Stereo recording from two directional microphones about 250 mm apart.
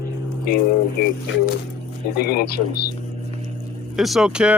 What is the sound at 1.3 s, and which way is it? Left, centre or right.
Speech, left.